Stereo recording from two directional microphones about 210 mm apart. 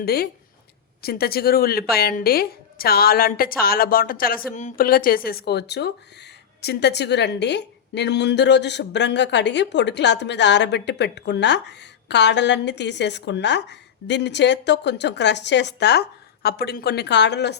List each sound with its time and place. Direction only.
0.0 s a woman's voice: 50° left (ahead or behind)